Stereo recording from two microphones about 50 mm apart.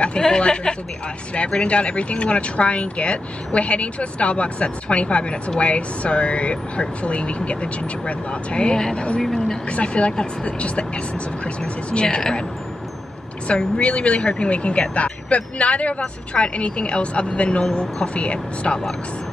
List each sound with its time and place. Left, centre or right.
0.4 s speech: centre
9.7 s speech: left
13.5 s speech: left